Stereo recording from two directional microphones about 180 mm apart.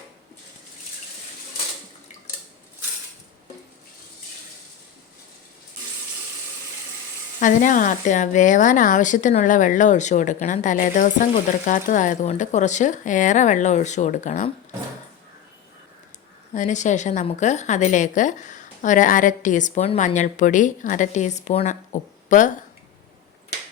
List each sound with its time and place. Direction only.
7.3 s speech: 45° left (ahead or behind)
16.6 s speech: 40° left (ahead or behind)